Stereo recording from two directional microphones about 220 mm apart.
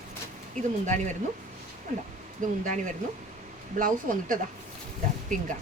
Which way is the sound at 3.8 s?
40° right (ahead or behind).